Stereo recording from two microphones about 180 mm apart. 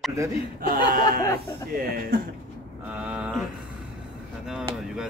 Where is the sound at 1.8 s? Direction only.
55° right (ahead or behind).